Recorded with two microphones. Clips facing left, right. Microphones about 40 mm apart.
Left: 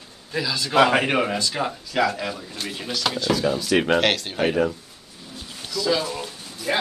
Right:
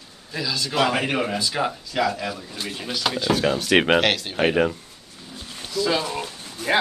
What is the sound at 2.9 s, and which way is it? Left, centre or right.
Speech, centre.